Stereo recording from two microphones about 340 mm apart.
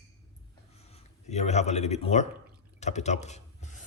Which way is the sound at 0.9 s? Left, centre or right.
Centre.